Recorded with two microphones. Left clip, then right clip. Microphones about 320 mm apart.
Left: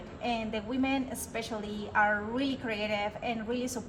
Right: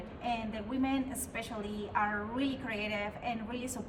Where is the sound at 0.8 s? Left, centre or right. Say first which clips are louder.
Left 1 dB; left.